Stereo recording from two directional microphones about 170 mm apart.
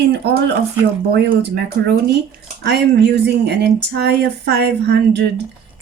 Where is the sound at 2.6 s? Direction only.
80° right.